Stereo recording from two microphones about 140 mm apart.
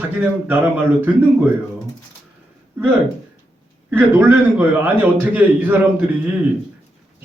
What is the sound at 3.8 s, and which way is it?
A man's voice, 15° right (ahead or behind).